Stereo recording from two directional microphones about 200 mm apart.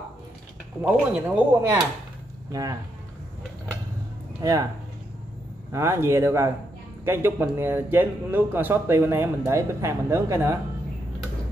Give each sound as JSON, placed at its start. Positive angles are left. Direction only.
{"t": 0.8, "sound": "a man's voice", "side_deg": -5}
{"t": 2.5, "sound": "speech", "side_deg": -20}
{"t": 4.4, "sound": "speech", "side_deg": -15}
{"t": 5.7, "sound": "a man's voice", "side_deg": -15}